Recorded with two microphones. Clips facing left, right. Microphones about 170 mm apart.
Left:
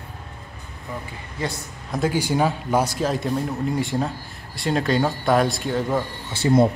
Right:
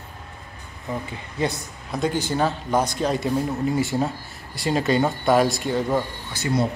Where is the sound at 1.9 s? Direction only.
5° left (ahead or behind).